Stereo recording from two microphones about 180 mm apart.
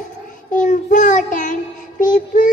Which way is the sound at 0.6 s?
45° left (ahead or behind).